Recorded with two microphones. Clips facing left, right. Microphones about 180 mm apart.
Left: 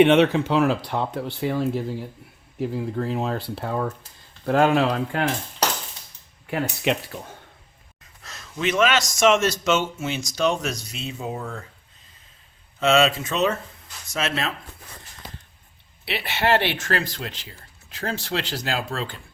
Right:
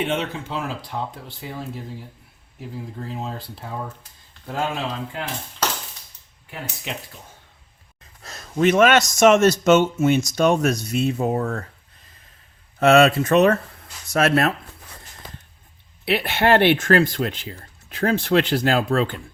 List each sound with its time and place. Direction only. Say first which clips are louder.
0.0 s speech: left 10 dB; 75° left (ahead or behind)
6.5 s speech: left 9 dB; 70° left (ahead or behind)
8.2 s a man's voice: right 8 dB; 40° right (ahead or behind); by 11.6 s 60° right (ahead or behind)
12.8 s a man's voice: right 5 dB; 60° right (ahead or behind)
16.0 s speech: right 4 dB; 50° right (ahead or behind)